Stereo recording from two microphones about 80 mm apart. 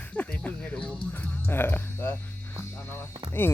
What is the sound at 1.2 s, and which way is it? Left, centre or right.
Speech, left.